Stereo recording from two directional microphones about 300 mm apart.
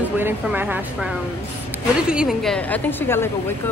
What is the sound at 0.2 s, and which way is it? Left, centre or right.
Speech, centre.